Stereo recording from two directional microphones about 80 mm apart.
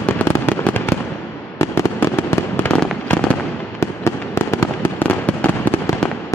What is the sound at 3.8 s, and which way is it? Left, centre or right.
Fireworks, left.